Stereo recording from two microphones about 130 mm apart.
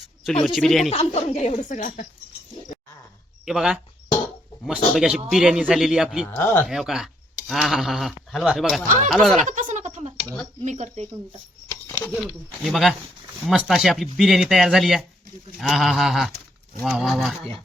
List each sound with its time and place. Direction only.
0.4 s speech: centre (ahead or behind)
0.9 s a woman's voice: 55° left (ahead or behind); by 2.0 s 80° left
3.4 s speech: 5° right (ahead or behind)
6.3 s speech: 15° left (ahead or behind)
6.7 s speech: 5° right (ahead or behind)
9.5 s a sound: 75° right (ahead or behind)
10.6 s speech: 65° right (ahead or behind)
11.7 s a sound: 20° left (ahead or behind)
12.2 s speech: centre (ahead or behind)